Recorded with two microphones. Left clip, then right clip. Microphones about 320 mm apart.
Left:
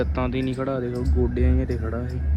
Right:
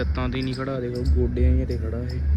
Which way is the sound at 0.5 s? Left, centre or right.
Left.